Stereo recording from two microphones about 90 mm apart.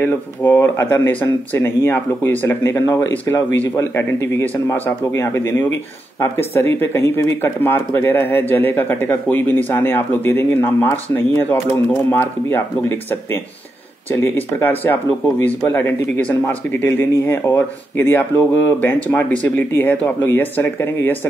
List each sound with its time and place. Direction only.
0.0 s speech: 25° left (ahead or behind)